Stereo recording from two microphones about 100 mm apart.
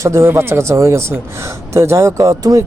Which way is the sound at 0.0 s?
25° right (ahead or behind).